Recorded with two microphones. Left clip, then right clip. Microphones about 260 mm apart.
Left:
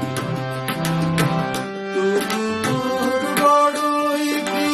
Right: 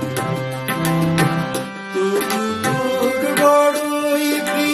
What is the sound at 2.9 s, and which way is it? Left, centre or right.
Music, centre.